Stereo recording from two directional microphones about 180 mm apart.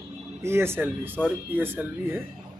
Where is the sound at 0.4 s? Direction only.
15° right (ahead or behind).